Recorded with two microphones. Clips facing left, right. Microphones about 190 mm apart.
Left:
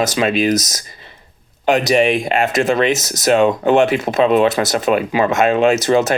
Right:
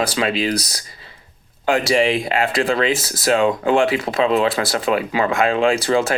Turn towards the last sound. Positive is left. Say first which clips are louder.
# left 3 dB
turn(degrees=20)  # may be behind; listen again after turning